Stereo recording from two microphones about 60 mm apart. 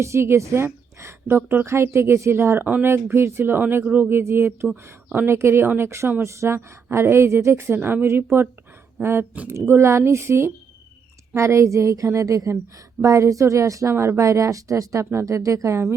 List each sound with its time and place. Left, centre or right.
0.0 s a woman's voice: right
1.6 s speech: right
4.1 s speech: right
4.7 s speech: right
5.2 s speech: right
13.9 s speech: right
14.2 s speech: right